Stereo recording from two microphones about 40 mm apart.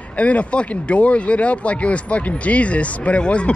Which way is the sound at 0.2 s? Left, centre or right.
Left.